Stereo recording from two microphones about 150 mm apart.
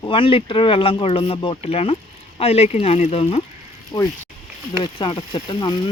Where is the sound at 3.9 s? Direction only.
30° left (ahead or behind).